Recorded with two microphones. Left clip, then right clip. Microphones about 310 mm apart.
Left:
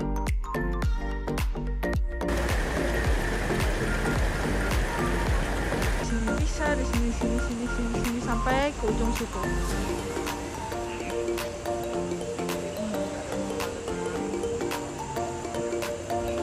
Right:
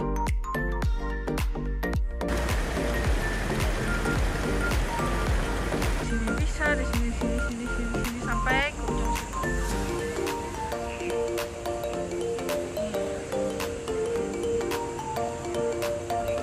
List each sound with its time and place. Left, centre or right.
1.9 s music: centre
8.5 s music: centre